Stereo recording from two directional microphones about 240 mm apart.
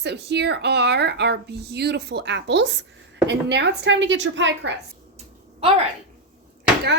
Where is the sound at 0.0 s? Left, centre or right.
Right.